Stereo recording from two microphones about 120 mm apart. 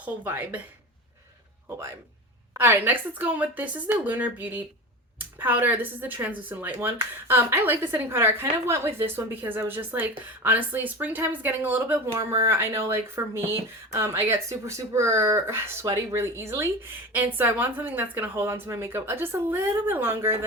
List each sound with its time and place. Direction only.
0.0 s speech: 15° right (ahead or behind)
2.6 s speech: 15° right (ahead or behind)